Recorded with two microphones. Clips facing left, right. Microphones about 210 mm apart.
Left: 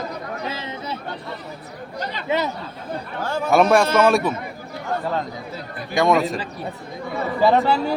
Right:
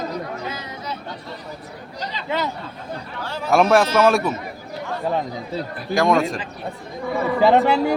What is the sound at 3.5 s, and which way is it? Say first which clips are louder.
Speech: even; centre (ahead or behind).